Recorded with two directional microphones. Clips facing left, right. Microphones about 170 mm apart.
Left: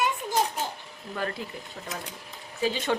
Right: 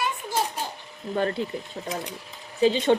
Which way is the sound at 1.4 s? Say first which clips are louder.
Right 8 dB; 30° right (ahead or behind).